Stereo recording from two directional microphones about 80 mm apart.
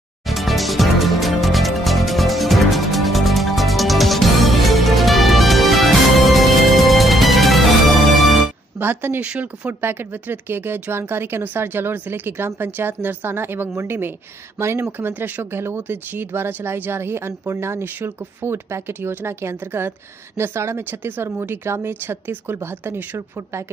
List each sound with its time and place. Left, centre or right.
0.3 s music: centre
8.7 s a sound: right
9.2 s a woman's voice: centre; by 23.6 s right